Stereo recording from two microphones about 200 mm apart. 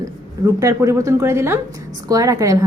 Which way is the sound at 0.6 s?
15° right (ahead or behind).